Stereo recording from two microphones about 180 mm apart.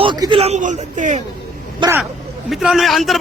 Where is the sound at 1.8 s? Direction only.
25° right (ahead or behind).